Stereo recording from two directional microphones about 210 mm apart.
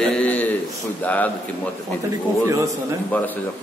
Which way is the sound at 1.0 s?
5° left (ahead or behind).